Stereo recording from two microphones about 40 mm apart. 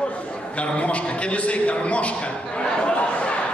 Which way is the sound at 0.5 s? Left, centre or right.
Left.